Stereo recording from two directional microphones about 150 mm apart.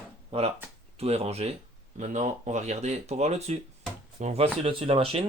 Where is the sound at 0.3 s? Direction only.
45° right (ahead or behind).